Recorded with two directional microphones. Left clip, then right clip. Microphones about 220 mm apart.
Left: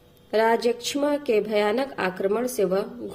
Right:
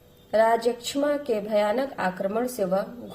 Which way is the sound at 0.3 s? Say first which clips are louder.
Even; 40° left (ahead or behind).